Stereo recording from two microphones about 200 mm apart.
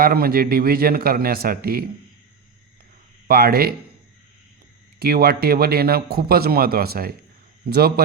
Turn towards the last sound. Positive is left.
turn(degrees=-50)  # may be behind; listen again after turning